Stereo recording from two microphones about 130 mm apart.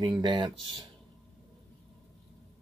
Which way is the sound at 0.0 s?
35° right (ahead or behind).